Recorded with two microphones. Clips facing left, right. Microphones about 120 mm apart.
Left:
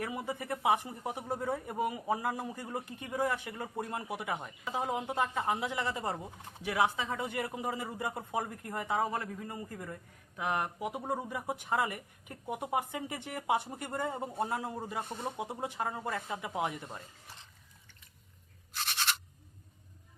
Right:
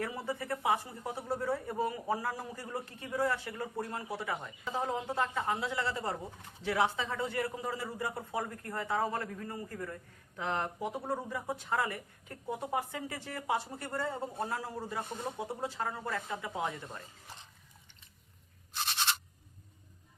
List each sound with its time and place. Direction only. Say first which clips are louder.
0.0 s a man's voice: even; 15° left (ahead or behind)